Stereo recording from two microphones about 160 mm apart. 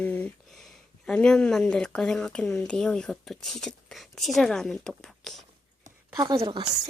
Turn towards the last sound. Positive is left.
turn(degrees=-30)  # may be behind; listen again after turning